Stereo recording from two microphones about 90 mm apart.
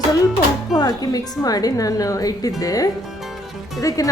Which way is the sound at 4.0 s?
40° left (ahead or behind).